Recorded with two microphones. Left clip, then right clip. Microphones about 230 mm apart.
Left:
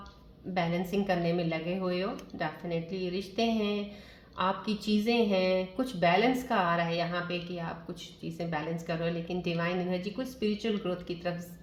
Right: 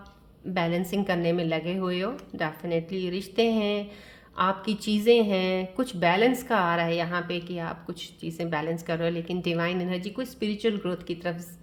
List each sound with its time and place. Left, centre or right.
0.5 s speech: right